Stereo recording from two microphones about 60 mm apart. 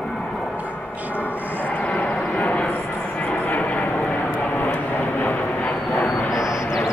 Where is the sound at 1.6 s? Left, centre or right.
Left.